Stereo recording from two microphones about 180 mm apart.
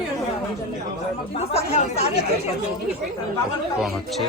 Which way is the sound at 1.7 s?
35° left (ahead or behind).